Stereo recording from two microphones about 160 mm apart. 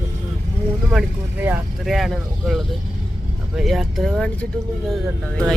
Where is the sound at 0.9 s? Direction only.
10° right (ahead or behind).